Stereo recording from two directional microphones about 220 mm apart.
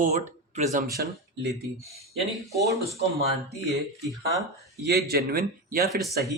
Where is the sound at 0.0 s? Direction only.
30° right (ahead or behind).